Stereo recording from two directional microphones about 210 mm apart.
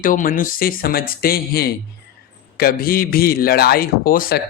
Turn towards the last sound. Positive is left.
turn(degrees=45)  # may be behind; listen again after turning